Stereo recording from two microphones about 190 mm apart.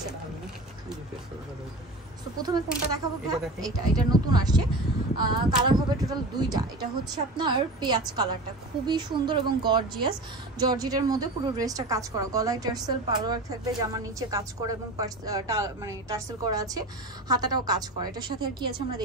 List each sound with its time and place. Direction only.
2.4 s a woman's voice: 20° right (ahead or behind)